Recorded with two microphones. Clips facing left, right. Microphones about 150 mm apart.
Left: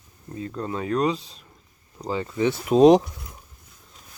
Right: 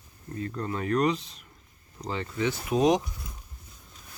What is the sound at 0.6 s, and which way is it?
Speech, 30° left (ahead or behind).